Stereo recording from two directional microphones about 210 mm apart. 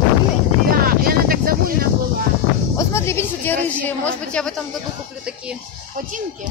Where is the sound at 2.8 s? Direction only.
15° left (ahead or behind).